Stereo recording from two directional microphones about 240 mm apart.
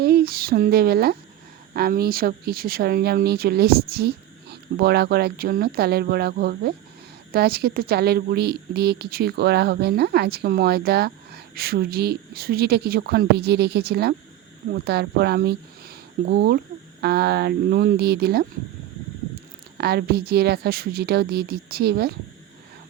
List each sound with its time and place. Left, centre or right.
0.0 s a woman's voice: right
19.8 s a woman's voice: right